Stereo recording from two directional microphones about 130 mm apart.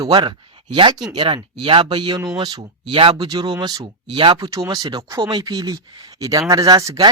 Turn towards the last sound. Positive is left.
turn(degrees=-30)  # may be behind; listen again after turning